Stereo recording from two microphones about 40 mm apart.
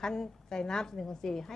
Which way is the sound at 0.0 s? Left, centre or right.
Centre.